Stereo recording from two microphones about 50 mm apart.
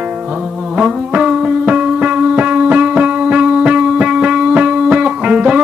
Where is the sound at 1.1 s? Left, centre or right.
Right.